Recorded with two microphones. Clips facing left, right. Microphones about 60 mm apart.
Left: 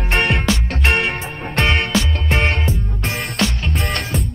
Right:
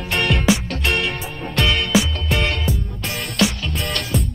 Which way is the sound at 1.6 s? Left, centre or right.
Left.